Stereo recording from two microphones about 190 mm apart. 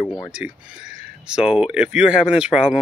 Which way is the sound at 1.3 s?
5° right (ahead or behind).